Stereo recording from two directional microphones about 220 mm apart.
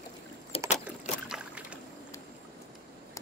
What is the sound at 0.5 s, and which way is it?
Rowboat, 25° left (ahead or behind).